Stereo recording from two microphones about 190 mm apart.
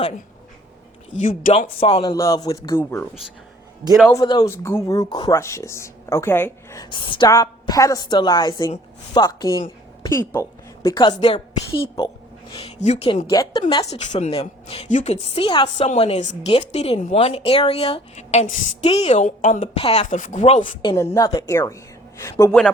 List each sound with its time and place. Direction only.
1.1 s a woman's voice: 40° left (ahead or behind)
2.1 s speech: 20° left (ahead or behind)
4.1 s speech: 20° left (ahead or behind)
6.9 s a woman's voice: 25° left (ahead or behind)
12.8 s a woman's voice: 35° left (ahead or behind)
13.3 s a woman's voice: 20° left (ahead or behind)
14.0 s a woman's voice: 35° left (ahead or behind)
20.8 s speech: 15° left (ahead or behind)